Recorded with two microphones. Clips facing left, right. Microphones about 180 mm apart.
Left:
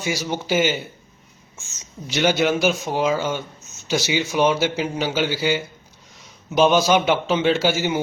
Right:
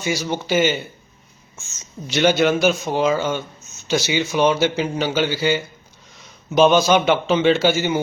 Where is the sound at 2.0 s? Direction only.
15° left (ahead or behind).